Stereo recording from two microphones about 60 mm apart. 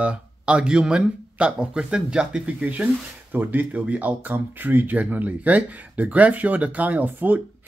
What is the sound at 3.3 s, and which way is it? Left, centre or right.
Speech, right.